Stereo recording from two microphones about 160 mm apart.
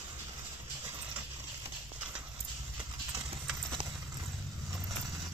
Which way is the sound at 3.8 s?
30° right (ahead or behind).